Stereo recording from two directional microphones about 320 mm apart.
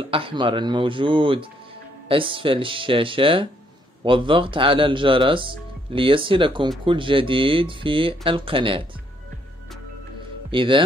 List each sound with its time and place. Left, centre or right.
0.1 s speech: centre
10.5 s speech: centre